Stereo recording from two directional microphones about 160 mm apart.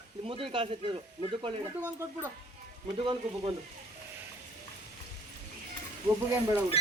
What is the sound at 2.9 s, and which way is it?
Speech, 30° right (ahead or behind).